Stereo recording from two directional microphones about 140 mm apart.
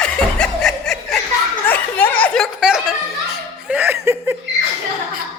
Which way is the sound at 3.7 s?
15° right (ahead or behind).